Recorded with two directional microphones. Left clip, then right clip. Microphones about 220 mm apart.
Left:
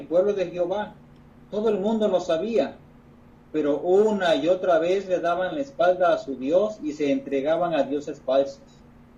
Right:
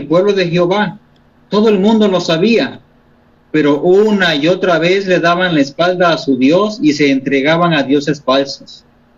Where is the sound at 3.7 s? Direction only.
45° right (ahead or behind).